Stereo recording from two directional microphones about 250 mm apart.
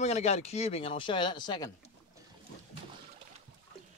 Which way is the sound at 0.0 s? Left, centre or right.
Left.